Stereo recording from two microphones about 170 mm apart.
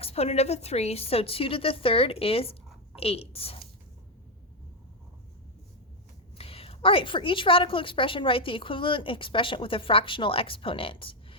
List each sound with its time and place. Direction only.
0.0 s a woman's voice: 35° left (ahead or behind)
6.3 s a woman's voice: 35° left (ahead or behind)